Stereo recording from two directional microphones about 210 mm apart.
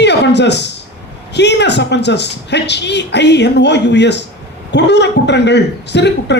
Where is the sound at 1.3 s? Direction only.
55° left (ahead or behind).